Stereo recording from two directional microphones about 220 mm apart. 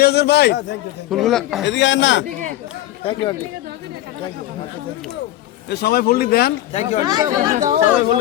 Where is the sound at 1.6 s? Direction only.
55° left (ahead or behind).